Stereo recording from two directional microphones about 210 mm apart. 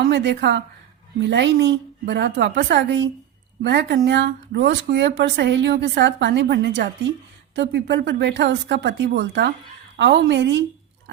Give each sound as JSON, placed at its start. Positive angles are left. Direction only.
{"t": 0.1, "sound": "speech", "side_deg": -55}